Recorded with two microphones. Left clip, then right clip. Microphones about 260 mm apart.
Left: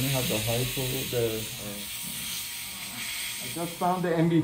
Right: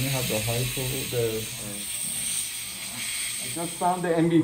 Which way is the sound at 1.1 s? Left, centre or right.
Centre.